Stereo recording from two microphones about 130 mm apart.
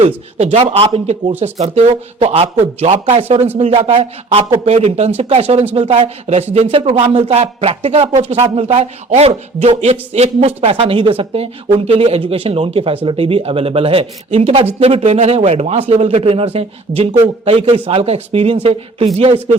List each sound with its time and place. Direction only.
0.3 s speech: 50° right (ahead or behind)
6.8 s a sound: 40° right (ahead or behind)
7.2 s speech: 55° right (ahead or behind)